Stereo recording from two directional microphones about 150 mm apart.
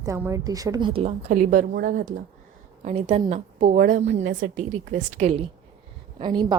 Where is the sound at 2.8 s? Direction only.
45° right (ahead or behind).